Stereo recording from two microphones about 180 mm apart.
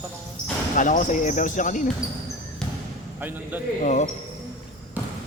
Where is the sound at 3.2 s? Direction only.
10° right (ahead or behind).